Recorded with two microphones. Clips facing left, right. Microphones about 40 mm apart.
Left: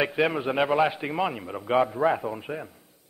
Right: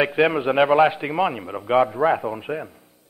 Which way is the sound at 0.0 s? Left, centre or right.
Centre.